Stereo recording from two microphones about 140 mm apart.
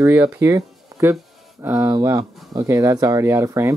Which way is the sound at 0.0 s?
10° right (ahead or behind).